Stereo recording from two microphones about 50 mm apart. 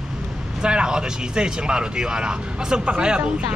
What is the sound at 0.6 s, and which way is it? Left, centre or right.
Speech, centre.